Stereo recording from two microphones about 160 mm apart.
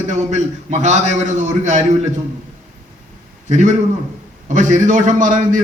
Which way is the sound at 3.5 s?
50° right (ahead or behind).